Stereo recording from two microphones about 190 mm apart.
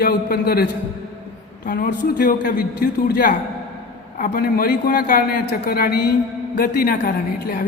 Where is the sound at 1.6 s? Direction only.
50° left (ahead or behind).